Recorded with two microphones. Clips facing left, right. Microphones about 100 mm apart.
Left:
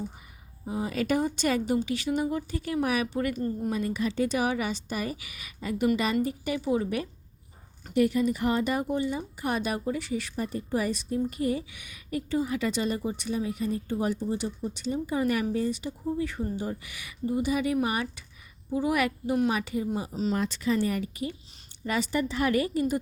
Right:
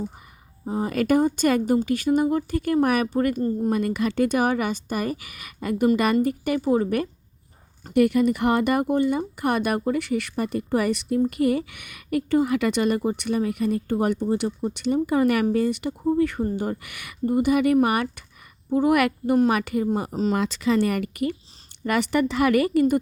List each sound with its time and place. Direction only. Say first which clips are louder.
0.6 s speech: right 5 dB; 40° right (ahead or behind)
3.7 s speech: right 5 dB; 60° right (ahead or behind)
7.9 s a woman's voice: right 5 dB; 65° right (ahead or behind)
20.3 s a woman's voice: right 5 dB; 90° right; by 23.0 s 65° right (ahead or behind)